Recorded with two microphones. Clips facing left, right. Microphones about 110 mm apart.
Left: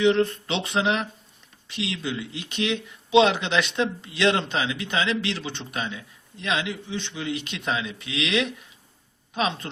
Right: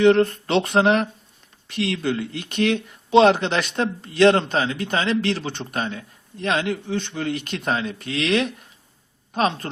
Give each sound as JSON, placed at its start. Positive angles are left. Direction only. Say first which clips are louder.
{"t": 0.0, "sound": "speech", "louder": "right 5 dB", "side_deg": -55}